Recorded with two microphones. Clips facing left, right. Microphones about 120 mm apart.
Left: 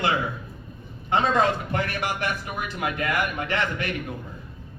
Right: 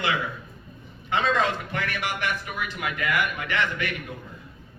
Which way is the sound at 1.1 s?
40° left (ahead or behind).